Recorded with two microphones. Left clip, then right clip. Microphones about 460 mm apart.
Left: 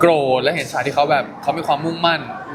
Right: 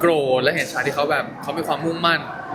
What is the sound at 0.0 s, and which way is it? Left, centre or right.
Speech, left.